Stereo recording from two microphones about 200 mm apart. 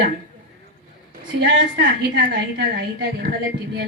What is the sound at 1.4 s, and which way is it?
Speech, 50° right (ahead or behind).